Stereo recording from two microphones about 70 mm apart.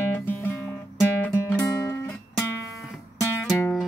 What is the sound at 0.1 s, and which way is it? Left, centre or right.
Music, left.